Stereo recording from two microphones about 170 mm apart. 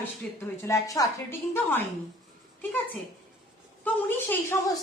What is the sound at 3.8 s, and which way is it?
Speech, 10° left (ahead or behind).